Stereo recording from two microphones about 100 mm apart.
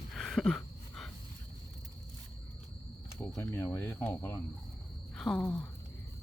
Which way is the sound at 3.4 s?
25° left (ahead or behind).